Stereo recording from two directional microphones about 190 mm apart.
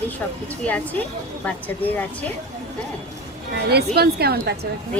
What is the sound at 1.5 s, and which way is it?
Speech, 10° left (ahead or behind).